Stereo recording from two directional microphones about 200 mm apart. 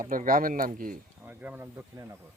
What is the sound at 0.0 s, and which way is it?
Speech, 45° right (ahead or behind).